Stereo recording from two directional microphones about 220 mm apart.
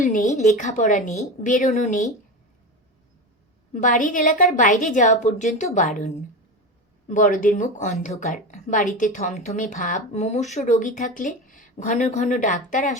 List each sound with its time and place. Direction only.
0.0 s speech: 35° left (ahead or behind)
3.8 s speech: 35° left (ahead or behind)
7.1 s a woman's voice: 35° left (ahead or behind)